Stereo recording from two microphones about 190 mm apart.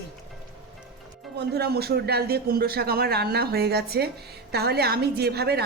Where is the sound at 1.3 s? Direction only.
60° right (ahead or behind).